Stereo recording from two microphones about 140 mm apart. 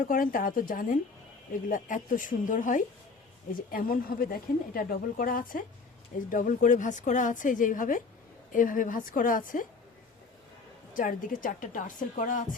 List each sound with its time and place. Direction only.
0.1 s a woman's voice: 85° left
1.7 s a woman's voice: 70° left (ahead or behind)
3.7 s a woman's voice: 90° left
10.9 s a woman's voice: 70° left (ahead or behind)